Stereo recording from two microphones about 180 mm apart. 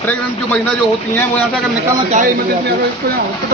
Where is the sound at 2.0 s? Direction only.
45° right (ahead or behind).